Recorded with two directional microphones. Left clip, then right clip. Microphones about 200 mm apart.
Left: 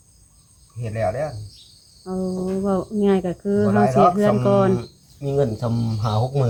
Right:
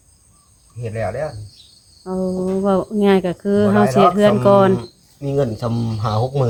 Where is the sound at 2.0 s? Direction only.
25° right (ahead or behind).